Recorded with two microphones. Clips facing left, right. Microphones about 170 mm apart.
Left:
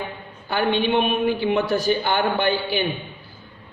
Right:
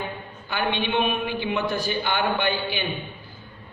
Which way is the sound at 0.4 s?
45° left (ahead or behind).